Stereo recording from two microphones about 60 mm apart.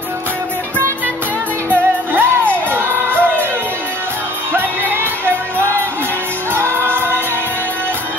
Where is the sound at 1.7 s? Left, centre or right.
Right.